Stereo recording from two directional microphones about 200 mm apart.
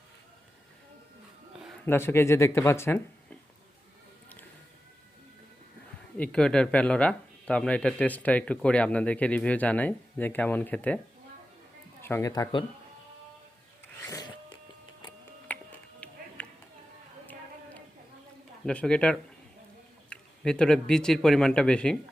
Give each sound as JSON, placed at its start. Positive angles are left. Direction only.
{"t": 1.8, "sound": "speech", "side_deg": 10}
{"t": 6.1, "sound": "speech", "side_deg": 5}
{"t": 12.0, "sound": "speech", "side_deg": 15}
{"t": 14.1, "sound": "a sound", "side_deg": 20}
{"t": 15.5, "sound": "music", "side_deg": 10}
{"t": 16.4, "sound": "a sound", "side_deg": 5}
{"t": 18.6, "sound": "speech", "side_deg": 5}